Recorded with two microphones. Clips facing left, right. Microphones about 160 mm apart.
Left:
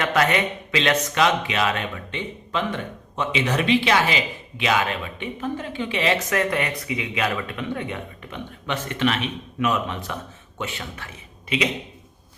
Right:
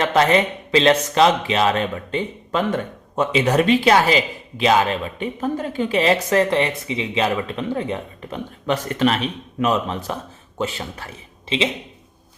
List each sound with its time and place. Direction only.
0.0 s speech: 30° right (ahead or behind)